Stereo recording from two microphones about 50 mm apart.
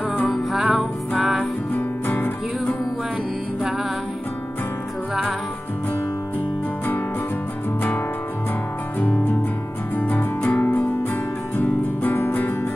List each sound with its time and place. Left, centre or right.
0.6 s music: centre
2.0 s music: left
9.9 s music: left